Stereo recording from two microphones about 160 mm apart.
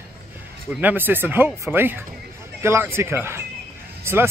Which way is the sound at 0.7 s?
10° right (ahead or behind).